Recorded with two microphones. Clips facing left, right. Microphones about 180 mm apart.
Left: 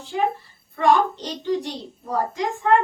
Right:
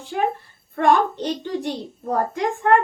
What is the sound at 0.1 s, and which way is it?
A child's voice, 55° right (ahead or behind).